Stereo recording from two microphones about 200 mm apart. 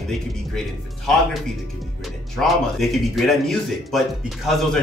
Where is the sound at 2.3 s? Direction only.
Centre (ahead or behind).